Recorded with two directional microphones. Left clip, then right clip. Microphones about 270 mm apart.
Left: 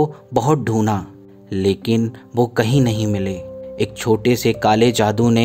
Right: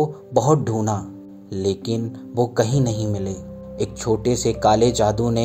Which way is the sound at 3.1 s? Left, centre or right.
Left.